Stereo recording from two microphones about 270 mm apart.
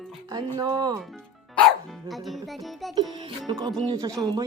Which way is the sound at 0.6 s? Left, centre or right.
Centre.